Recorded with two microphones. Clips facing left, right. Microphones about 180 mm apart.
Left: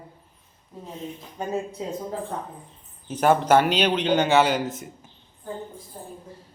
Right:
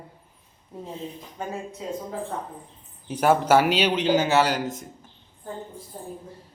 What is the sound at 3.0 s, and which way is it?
Speech, 10° right (ahead or behind).